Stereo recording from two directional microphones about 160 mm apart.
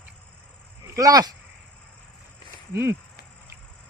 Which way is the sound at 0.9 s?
20° right (ahead or behind).